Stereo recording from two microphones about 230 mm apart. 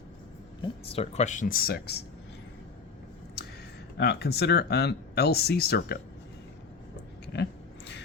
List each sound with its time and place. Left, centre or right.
0.6 s speech: left
3.9 s speech: left